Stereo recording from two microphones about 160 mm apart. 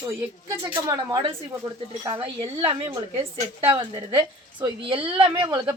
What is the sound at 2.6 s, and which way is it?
A woman's voice, 35° right (ahead or behind).